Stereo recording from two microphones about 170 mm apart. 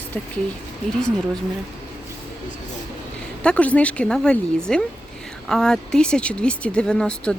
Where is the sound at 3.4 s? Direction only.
5° left (ahead or behind).